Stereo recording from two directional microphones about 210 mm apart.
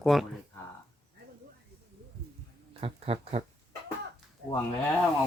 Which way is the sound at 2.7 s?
25° right (ahead or behind).